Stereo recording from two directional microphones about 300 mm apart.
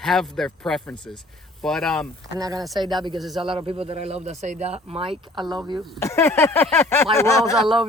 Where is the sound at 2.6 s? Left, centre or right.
Centre.